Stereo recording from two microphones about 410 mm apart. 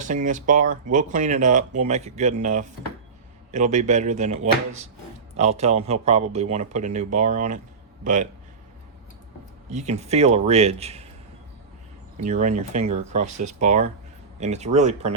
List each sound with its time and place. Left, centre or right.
0.0 s speech: centre
9.6 s speech: centre
12.2 s speech: centre